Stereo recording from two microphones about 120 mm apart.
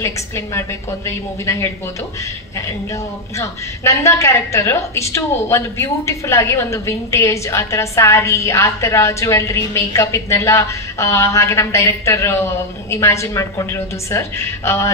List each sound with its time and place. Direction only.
0.6 s a woman's voice: 25° left (ahead or behind)
3.3 s a woman's voice: 25° left (ahead or behind)